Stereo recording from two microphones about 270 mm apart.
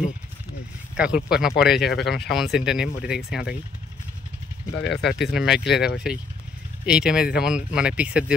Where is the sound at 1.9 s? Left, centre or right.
Left.